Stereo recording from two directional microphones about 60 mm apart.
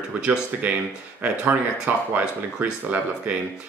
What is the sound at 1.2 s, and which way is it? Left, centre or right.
Speech, right.